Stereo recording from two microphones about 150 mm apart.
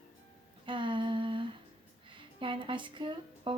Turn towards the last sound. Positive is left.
turn(degrees=-35)  # may be behind; listen again after turning